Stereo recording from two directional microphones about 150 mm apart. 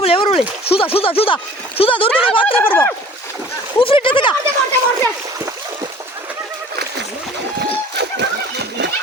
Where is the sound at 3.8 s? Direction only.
35° left (ahead or behind).